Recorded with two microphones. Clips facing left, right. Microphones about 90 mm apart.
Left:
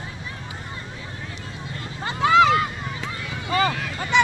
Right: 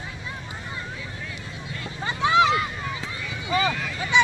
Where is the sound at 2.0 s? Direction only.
50° left (ahead or behind).